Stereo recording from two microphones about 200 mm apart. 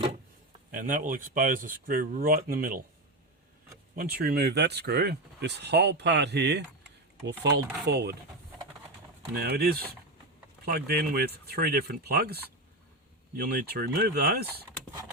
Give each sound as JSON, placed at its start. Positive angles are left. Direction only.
{"t": 0.7, "sound": "speech", "side_deg": -40}
{"t": 3.9, "sound": "speech", "side_deg": -50}
{"t": 9.3, "sound": "speech", "side_deg": -50}